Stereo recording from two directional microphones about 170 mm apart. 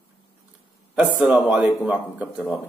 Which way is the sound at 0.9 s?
5° right (ahead or behind).